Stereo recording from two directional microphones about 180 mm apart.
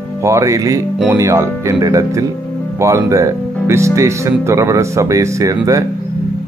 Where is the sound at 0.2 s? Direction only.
15° right (ahead or behind).